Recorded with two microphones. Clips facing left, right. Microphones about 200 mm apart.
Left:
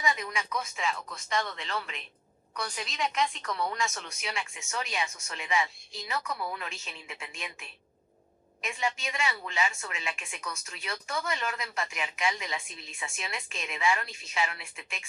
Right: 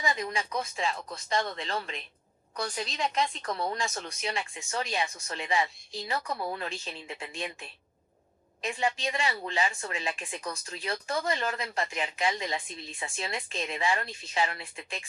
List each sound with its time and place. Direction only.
0.0 s a woman's voice: 35° right (ahead or behind)